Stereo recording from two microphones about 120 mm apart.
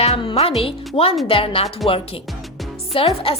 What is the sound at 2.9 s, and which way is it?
Speech, 50° left (ahead or behind).